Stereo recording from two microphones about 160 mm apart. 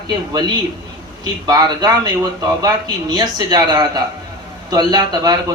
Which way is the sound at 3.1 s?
25° right (ahead or behind).